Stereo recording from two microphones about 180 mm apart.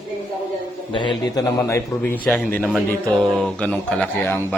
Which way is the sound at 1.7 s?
15° left (ahead or behind).